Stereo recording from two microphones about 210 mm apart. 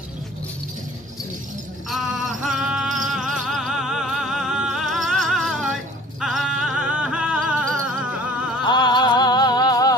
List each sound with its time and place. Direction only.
1.9 s a sound: centre (ahead or behind)
3.0 s music: centre (ahead or behind)
8.6 s music: 20° left (ahead or behind)